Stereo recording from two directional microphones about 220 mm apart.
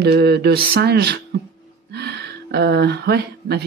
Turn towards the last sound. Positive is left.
turn(degrees=-50)  # may be behind; listen again after turning